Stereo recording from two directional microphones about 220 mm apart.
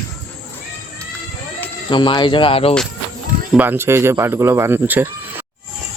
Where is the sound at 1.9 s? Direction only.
20° left (ahead or behind).